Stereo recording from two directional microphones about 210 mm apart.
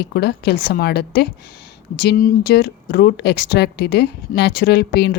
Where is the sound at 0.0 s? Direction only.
50° left (ahead or behind).